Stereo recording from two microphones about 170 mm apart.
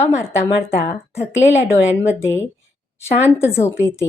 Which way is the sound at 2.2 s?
15° left (ahead or behind).